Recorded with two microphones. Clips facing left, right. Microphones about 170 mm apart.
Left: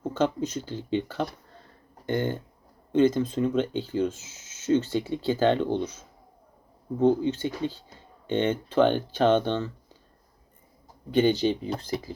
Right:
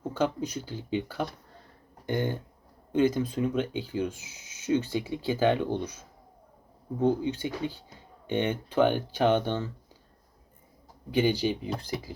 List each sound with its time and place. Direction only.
0.1 s speech: 10° right (ahead or behind)
11.1 s speech: 10° right (ahead or behind)